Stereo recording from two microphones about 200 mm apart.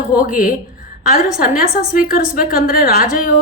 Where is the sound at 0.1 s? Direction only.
45° left (ahead or behind).